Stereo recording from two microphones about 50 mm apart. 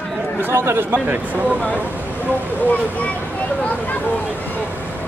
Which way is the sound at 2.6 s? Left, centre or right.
Left.